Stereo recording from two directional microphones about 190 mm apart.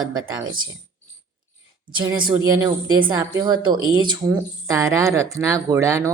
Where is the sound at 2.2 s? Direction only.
25° right (ahead or behind).